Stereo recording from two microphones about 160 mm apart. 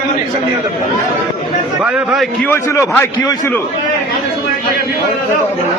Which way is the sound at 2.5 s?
15° left (ahead or behind).